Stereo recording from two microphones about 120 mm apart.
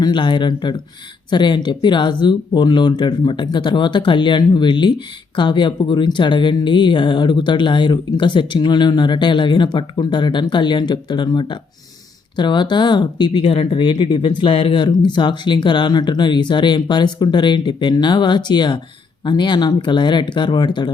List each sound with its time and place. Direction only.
0.0 s speech: 40° left (ahead or behind)